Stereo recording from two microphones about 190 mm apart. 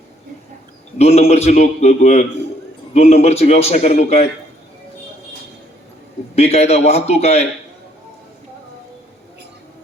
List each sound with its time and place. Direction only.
0.9 s a man's voice: 35° left (ahead or behind)
6.3 s a man's voice: 35° left (ahead or behind)